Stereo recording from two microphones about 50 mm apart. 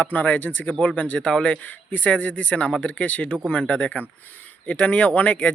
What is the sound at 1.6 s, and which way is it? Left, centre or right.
A man's voice, left.